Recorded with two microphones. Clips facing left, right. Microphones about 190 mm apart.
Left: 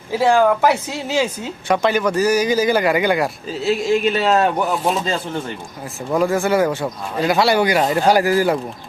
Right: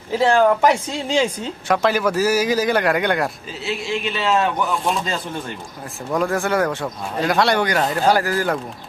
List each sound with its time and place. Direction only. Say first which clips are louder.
0.1 s speech: left 1 dB; 10° left (ahead or behind)
3.6 s speech: left 8 dB; 40° left (ahead or behind)
6.1 s speech: left 3 dB; 5° left (ahead or behind)